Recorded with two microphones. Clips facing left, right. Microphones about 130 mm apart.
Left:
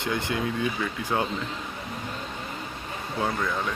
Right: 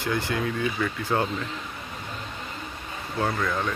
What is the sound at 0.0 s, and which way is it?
A man's voice, 20° left (ahead or behind).